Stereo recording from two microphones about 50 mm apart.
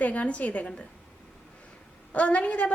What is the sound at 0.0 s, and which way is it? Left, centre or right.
Speech, left.